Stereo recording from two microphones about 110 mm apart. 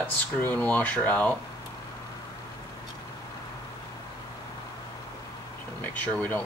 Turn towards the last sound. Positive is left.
turn(degrees=15)  # may be behind; listen again after turning